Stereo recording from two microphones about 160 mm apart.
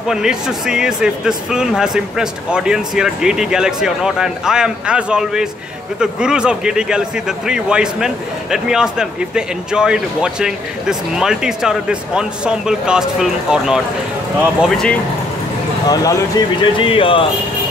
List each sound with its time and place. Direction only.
0.1 s speech: 5° right (ahead or behind)
15.9 s speech: 25° left (ahead or behind)